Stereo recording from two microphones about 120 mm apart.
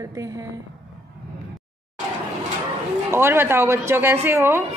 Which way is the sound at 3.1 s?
20° right (ahead or behind).